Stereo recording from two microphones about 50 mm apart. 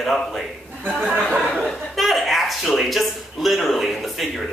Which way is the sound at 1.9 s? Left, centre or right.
Centre.